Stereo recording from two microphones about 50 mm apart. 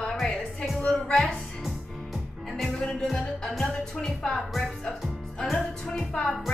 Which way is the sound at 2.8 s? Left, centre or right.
Centre.